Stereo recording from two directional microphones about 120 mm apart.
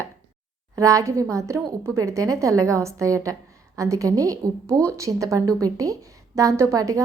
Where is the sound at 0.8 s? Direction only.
25° right (ahead or behind).